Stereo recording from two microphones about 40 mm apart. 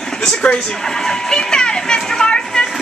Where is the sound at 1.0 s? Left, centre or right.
Centre.